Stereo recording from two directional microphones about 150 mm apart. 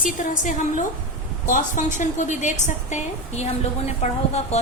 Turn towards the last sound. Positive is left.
turn(degrees=45)  # may be behind; listen again after turning